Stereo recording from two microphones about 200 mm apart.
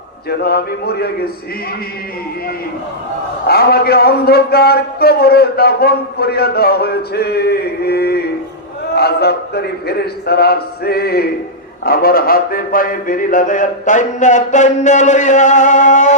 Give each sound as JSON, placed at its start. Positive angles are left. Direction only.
{"t": 0.3, "sound": "a man's voice", "side_deg": 50}
{"t": 3.4, "sound": "a man's voice", "side_deg": 50}